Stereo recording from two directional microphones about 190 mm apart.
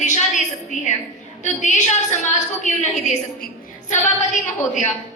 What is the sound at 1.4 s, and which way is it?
A woman's voice, 40° left (ahead or behind).